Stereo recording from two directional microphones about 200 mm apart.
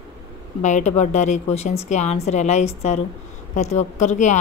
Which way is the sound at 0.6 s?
35° left (ahead or behind).